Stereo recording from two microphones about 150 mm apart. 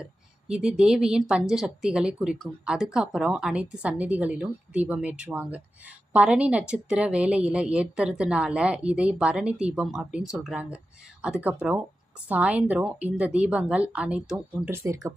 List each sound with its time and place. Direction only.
0.0 s a woman's voice: 5° right (ahead or behind)
14.7 s speech: 20° right (ahead or behind)